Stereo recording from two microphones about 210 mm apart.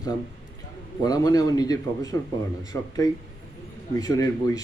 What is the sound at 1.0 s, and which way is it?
A man's voice, 20° left (ahead or behind).